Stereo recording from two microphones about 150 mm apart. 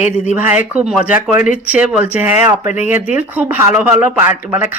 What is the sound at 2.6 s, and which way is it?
Speech, 55° left (ahead or behind).